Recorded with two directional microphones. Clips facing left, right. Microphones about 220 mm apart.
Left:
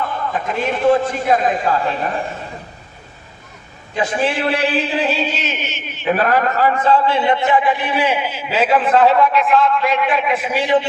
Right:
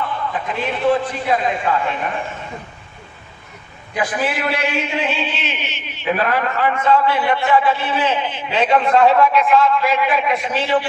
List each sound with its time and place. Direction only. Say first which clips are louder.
0.0 s a man's voice: left 2 dB; 45° left (ahead or behind)
3.9 s a man's voice: left 2 dB; 25° left (ahead or behind); by 10.6 s 5° left (ahead or behind)
10.6 s a man's voice: left 4 dB; 20° left (ahead or behind)